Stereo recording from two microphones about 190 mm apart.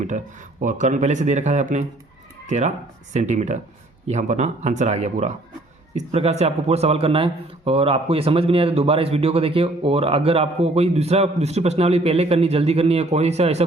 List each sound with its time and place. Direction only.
0.6 s speech: 40° right (ahead or behind)